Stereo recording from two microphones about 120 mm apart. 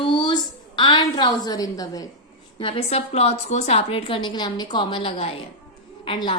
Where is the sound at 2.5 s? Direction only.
50° left (ahead or behind).